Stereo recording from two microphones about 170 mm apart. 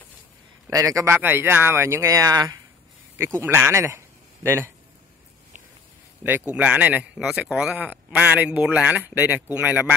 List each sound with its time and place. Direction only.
0.7 s a man's voice: 20° right (ahead or behind)
6.5 s a man's voice: 5° right (ahead or behind)